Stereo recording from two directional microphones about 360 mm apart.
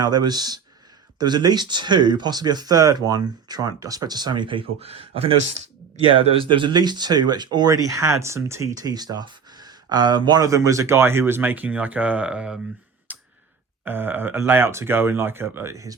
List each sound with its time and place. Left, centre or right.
0.0 s speech: centre
13.1 s a sound: centre
13.8 s speech: centre